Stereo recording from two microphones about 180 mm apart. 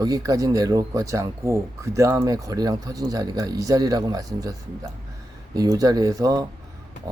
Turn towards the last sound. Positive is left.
turn(degrees=-20)  # may be behind; listen again after turning